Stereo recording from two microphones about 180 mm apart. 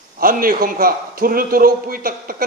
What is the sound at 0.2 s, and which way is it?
A man's voice, 50° right (ahead or behind).